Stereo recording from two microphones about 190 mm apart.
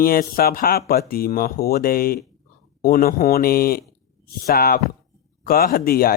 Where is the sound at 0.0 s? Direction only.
50° left (ahead or behind).